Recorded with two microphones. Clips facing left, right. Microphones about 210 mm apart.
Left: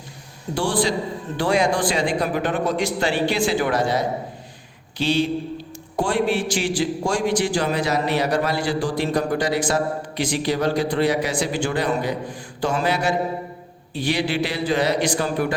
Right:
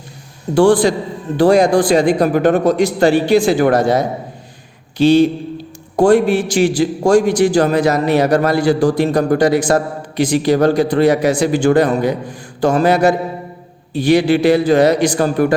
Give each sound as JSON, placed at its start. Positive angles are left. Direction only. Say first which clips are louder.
{"t": 0.5, "sound": "a man's voice", "louder": "right 11 dB", "side_deg": -50}